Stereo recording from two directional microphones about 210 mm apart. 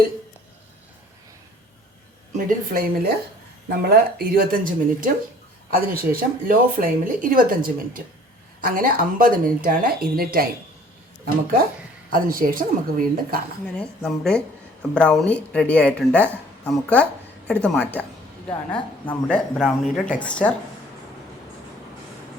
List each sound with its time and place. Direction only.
2.3 s speech: 45° right (ahead or behind)
12.1 s speech: 40° right (ahead or behind)
13.7 s a woman's voice: 5° left (ahead or behind)